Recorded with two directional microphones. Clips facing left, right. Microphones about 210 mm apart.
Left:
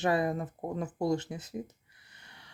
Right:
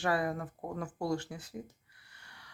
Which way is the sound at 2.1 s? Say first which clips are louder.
Left 2 dB; 20° left (ahead or behind).